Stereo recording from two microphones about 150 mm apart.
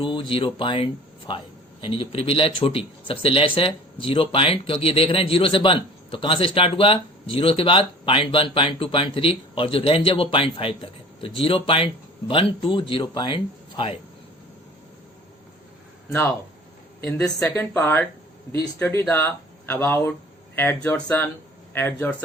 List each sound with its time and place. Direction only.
0.0 s speech: 35° left (ahead or behind)
17.0 s speech: 10° left (ahead or behind)